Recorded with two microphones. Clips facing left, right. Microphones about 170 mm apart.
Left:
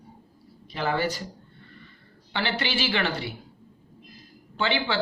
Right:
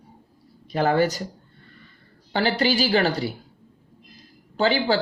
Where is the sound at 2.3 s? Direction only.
40° right (ahead or behind).